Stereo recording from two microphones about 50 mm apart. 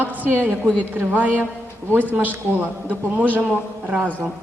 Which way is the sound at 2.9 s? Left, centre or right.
Right.